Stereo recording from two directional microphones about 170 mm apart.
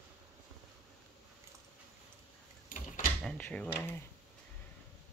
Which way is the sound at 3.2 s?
10° left (ahead or behind).